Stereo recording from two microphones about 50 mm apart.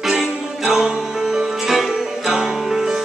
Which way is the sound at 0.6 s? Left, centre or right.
Centre.